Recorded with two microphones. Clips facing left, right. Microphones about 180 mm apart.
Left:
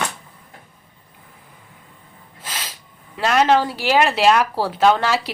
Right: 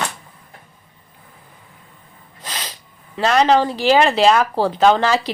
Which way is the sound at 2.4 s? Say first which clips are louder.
Right 2 dB; 5° left (ahead or behind).